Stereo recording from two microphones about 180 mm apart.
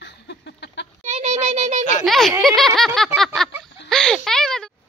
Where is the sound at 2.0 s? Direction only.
Centre (ahead or behind).